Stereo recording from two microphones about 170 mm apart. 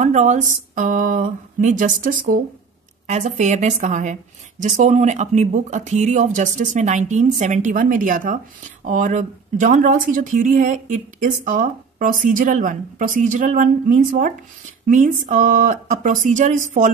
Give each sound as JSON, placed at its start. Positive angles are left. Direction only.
{"t": 0.0, "sound": "a woman's voice", "side_deg": -45}